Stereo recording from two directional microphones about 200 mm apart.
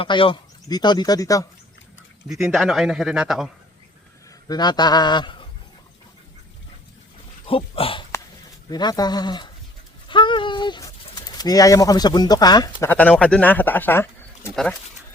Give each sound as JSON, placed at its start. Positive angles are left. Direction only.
{"t": 0.0, "sound": "speech", "side_deg": 25}
{"t": 2.5, "sound": "a man's voice", "side_deg": 0}
{"t": 4.4, "sound": "speech", "side_deg": 20}
{"t": 7.4, "sound": "speech", "side_deg": 25}